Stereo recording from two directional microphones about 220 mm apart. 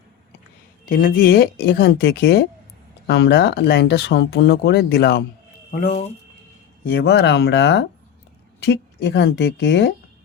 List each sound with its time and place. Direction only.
0.9 s speech: 40° left (ahead or behind)
5.7 s speech: 30° left (ahead or behind)
6.8 s speech: 45° left (ahead or behind)